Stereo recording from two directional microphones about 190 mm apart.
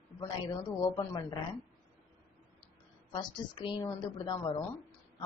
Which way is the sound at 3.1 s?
25° left (ahead or behind).